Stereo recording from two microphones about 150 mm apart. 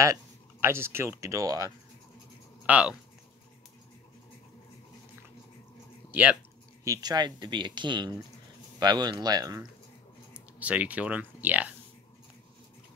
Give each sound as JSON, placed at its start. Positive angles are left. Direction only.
{"t": 0.0, "sound": "speech", "side_deg": -20}
{"t": 2.6, "sound": "speech", "side_deg": -10}
{"t": 6.8, "sound": "speech", "side_deg": -25}
{"t": 10.3, "sound": "speech", "side_deg": -10}